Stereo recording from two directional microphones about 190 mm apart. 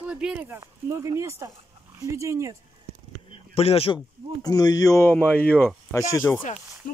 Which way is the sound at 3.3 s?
30° left (ahead or behind).